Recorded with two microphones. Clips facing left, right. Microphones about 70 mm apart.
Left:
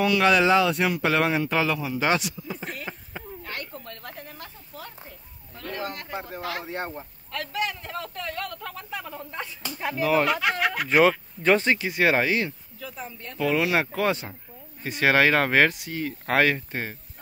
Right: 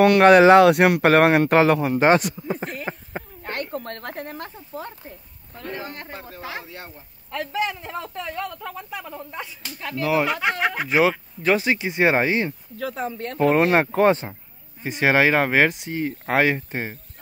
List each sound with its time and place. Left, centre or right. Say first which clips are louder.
0.0 s speech: right 8 dB; right
2.8 s a sound: right 6 dB; right
3.5 s speech: right 8 dB; right
4.7 s speech: right 7 dB; right
6.6 s speech: left 7 dB; left
7.2 s a man's voice: right 4 dB; right; by 9.5 s centre
9.8 s speech: left 1 dB; centre
10.0 s a man's voice: right 1 dB; centre
11.8 s speech: right 3 dB; right
12.7 s speech: right 10 dB; right
13.4 s speech: right 6 dB; right
14.8 s speech: right 2 dB; centre